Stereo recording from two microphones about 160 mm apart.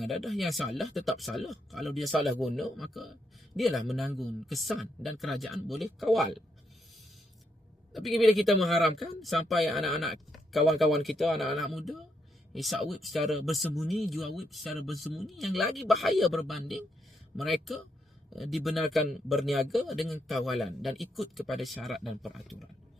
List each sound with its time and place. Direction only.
0.0 s speech: centre (ahead or behind)
7.9 s speech: centre (ahead or behind)